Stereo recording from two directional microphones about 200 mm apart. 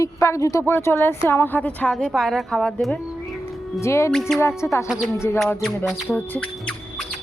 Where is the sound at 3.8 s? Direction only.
15° left (ahead or behind).